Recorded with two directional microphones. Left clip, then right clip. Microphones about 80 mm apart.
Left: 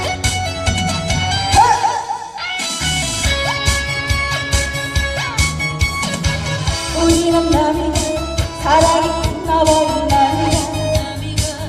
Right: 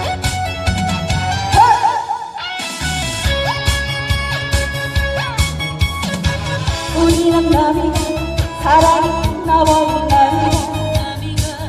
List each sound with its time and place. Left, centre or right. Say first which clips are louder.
0.8 s music: even; left
3.2 s music: even; left
6.9 s music: right 1 dB; left